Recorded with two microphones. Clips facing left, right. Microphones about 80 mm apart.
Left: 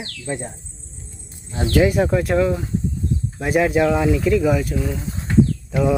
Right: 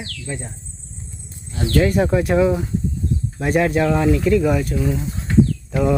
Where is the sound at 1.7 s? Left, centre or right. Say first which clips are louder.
Left 1 dB; centre.